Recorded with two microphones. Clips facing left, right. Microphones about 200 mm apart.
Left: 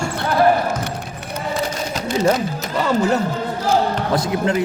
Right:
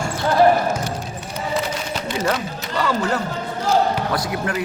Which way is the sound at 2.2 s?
25° left (ahead or behind).